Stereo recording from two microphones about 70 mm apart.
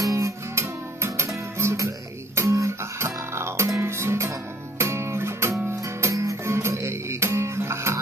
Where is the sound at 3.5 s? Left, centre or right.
Right.